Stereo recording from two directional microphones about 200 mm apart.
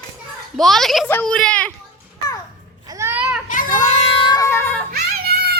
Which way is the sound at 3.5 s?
40° left (ahead or behind).